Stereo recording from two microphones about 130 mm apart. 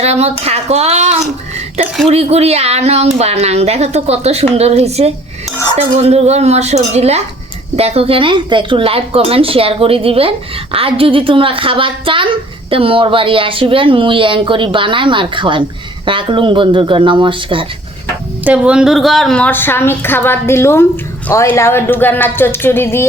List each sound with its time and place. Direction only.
0.0 s a woman's voice: 55° right (ahead or behind)
18.4 s a woman's voice: 10° right (ahead or behind); by 23.0 s 20° left (ahead or behind)